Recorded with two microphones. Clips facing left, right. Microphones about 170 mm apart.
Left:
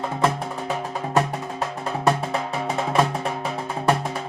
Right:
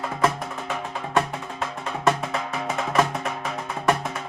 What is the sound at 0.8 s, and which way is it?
Music, 40° left (ahead or behind).